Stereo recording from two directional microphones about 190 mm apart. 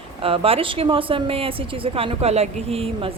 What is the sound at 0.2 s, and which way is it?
Speech, 30° right (ahead or behind).